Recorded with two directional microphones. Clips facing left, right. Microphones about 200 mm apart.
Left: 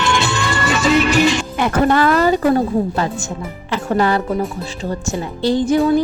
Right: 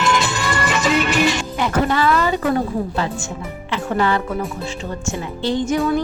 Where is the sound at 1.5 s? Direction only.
55° left (ahead or behind).